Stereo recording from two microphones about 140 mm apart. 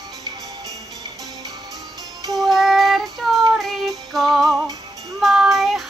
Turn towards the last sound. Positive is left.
turn(degrees=0)  # may be behind; listen again after turning